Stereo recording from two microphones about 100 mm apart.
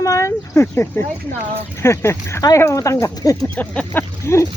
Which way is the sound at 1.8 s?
25° left (ahead or behind).